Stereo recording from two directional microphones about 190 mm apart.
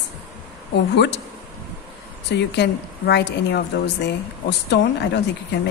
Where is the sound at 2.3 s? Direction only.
65° left (ahead or behind).